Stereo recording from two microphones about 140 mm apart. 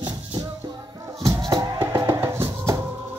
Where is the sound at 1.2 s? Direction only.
25° right (ahead or behind).